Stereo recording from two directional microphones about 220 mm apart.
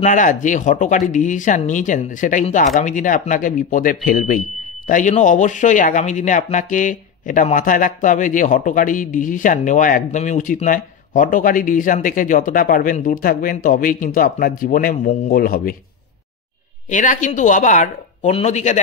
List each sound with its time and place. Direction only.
0.0 s speech: 35° left (ahead or behind)
16.9 s speech: 35° left (ahead or behind)